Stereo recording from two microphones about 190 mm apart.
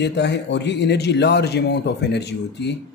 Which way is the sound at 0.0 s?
65° left (ahead or behind).